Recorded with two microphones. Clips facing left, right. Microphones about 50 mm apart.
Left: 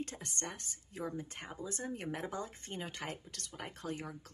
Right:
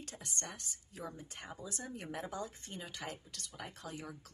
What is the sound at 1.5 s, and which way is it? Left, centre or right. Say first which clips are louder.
Speech: left 4 dB; left.